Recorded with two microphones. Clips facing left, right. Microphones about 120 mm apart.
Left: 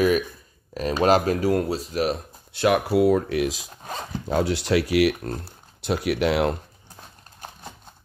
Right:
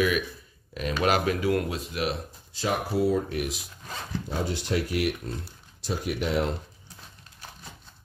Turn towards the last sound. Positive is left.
turn(degrees=75)  # may be behind; listen again after turning